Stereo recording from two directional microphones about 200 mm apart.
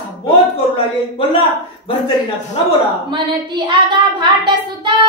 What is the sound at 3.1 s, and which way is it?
Speech, 25° right (ahead or behind).